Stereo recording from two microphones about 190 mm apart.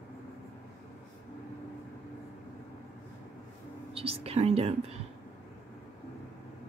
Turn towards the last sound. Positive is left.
turn(degrees=-35)  # may be behind; listen again after turning